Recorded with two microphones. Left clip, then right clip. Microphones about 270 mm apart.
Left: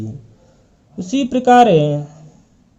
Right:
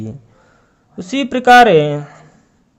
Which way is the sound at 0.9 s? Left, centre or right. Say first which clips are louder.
Even; right.